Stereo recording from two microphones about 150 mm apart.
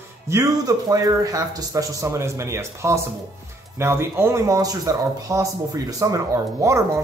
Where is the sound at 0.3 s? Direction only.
25° right (ahead or behind).